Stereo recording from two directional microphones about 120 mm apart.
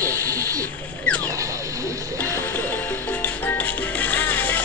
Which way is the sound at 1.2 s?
25° right (ahead or behind).